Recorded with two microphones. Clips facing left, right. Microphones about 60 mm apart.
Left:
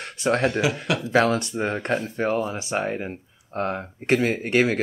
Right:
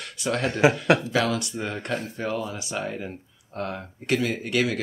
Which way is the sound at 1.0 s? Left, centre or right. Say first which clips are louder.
Left 4 dB; left.